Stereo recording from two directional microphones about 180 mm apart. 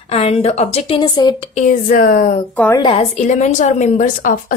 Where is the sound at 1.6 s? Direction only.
50° left (ahead or behind).